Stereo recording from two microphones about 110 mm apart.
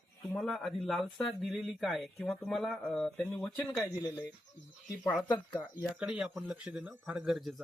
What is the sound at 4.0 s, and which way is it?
Speech, 40° left (ahead or behind).